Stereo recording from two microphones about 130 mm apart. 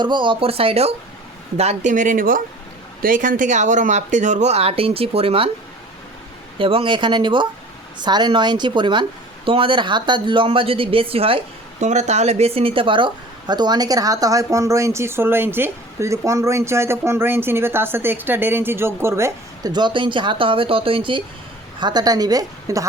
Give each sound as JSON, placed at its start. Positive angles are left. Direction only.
{"t": 0.0, "sound": "speech", "side_deg": -40}
{"t": 1.5, "sound": "speech", "side_deg": -60}
{"t": 6.6, "sound": "a woman's voice", "side_deg": -40}
{"t": 11.8, "sound": "a woman's voice", "side_deg": -65}
{"t": 19.7, "sound": "a woman's voice", "side_deg": -40}